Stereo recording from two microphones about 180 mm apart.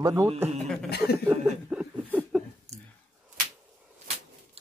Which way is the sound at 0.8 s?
60° left (ahead or behind).